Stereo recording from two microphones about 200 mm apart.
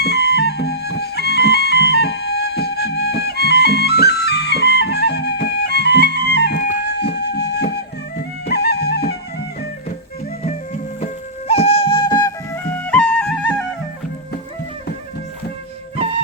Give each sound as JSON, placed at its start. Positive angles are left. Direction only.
{"t": 0.0, "sound": "music", "side_deg": 55}
{"t": 11.0, "sound": "music", "side_deg": 30}
{"t": 12.6, "sound": "music", "side_deg": 10}